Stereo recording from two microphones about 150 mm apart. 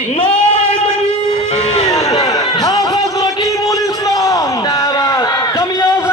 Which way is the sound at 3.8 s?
25° left (ahead or behind).